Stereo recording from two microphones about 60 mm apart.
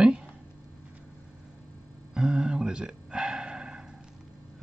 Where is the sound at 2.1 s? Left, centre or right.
Centre.